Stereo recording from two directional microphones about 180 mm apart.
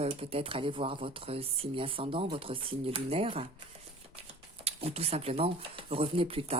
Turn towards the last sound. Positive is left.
turn(degrees=-35)  # may be behind; listen again after turning